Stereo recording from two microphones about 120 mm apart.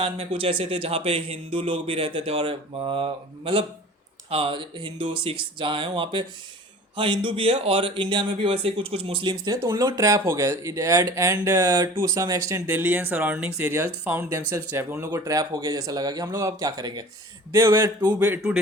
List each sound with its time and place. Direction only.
0.0 s a man's voice: 50° right (ahead or behind); by 14.3 s 15° right (ahead or behind)
14.3 s speech: 25° right (ahead or behind)
15.2 s speech: 30° right (ahead or behind)
17.5 s speech: 25° right (ahead or behind)